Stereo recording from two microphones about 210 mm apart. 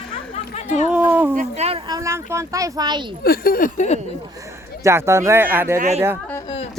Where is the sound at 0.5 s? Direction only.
35° left (ahead or behind).